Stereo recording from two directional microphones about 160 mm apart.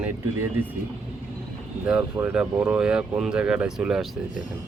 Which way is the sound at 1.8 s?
10° right (ahead or behind).